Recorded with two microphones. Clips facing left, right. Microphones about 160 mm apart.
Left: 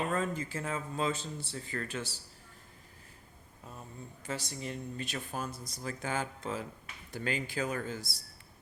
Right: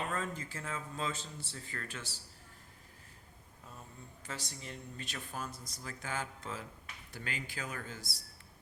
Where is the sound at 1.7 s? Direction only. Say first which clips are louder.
Left 8 dB; 30° left (ahead or behind).